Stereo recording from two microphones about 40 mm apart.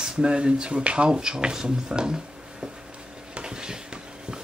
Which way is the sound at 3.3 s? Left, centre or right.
Right.